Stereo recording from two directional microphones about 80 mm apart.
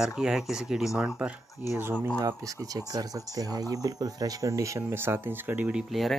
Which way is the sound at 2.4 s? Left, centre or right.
Right.